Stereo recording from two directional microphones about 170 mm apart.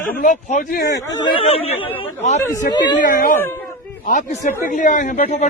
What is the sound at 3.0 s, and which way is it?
A man's voice, 55° left (ahead or behind).